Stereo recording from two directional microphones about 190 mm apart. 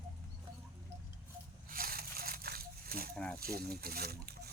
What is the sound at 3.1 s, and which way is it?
Snake, 5° left (ahead or behind).